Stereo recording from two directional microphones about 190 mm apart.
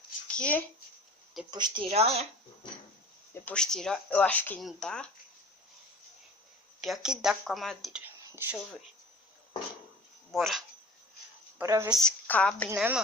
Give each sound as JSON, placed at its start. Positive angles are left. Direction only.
{"t": 0.3, "sound": "speech", "side_deg": 5}
{"t": 1.5, "sound": "speech", "side_deg": -20}
{"t": 3.4, "sound": "speech", "side_deg": 5}
{"t": 6.8, "sound": "speech", "side_deg": 0}
{"t": 10.3, "sound": "speech", "side_deg": 0}
{"t": 11.5, "sound": "speech", "side_deg": -15}
{"t": 11.9, "sound": "speech", "side_deg": 5}
{"t": 12.7, "sound": "a woman's voice", "side_deg": -10}